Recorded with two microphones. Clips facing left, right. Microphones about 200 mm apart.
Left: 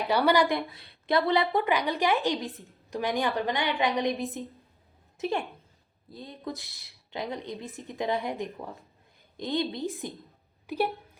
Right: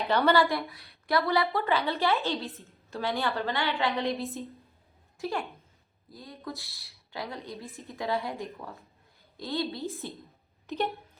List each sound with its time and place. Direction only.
0.1 s a woman's voice: 10° left (ahead or behind)